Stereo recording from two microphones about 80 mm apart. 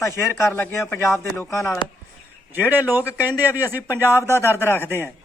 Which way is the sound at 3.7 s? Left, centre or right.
Left.